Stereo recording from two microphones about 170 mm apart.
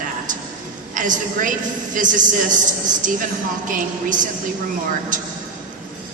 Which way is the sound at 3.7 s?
50° right (ahead or behind).